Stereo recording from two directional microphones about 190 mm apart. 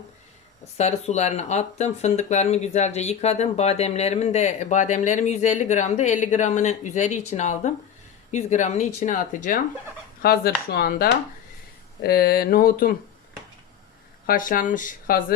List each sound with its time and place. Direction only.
0.8 s speech: 35° left (ahead or behind)
14.3 s speech: 45° left (ahead or behind)